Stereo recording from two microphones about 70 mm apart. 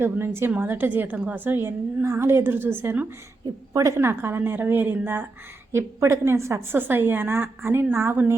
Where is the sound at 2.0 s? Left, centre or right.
Right.